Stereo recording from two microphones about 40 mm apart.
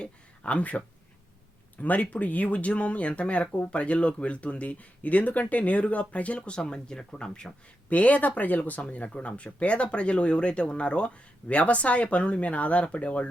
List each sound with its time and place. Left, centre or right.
0.0 s a sound: left
1.8 s speech: left
7.9 s speech: left